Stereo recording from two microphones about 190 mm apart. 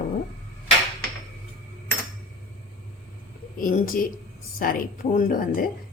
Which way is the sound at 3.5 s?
50° left (ahead or behind).